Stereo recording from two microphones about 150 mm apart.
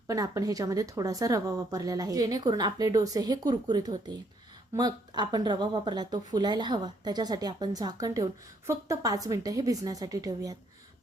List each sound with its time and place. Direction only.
0.1 s speech: 20° right (ahead or behind)